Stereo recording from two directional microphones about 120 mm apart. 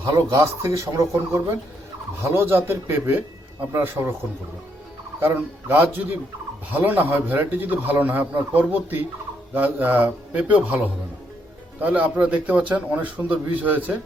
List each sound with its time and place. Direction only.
0.0 s speech: 25° right (ahead or behind)
5.2 s a man's voice: 20° right (ahead or behind)